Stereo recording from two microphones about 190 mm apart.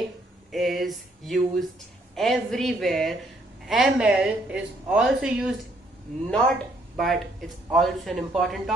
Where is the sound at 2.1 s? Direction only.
Centre (ahead or behind).